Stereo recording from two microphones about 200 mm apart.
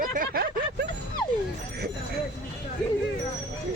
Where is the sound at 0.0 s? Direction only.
45° right (ahead or behind).